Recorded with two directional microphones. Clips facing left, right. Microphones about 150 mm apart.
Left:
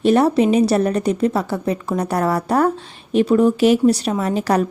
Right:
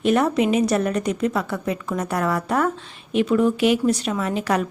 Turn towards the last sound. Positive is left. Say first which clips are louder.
# left 4 dB
turn(degrees=35)  # may be behind; listen again after turning